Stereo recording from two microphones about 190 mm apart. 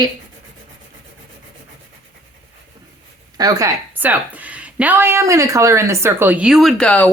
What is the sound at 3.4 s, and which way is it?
A woman's voice, 20° right (ahead or behind).